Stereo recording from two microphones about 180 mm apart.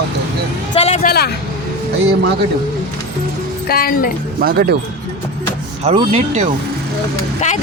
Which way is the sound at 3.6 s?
55° left (ahead or behind).